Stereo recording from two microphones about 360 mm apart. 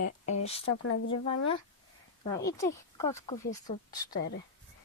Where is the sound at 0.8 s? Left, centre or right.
Left.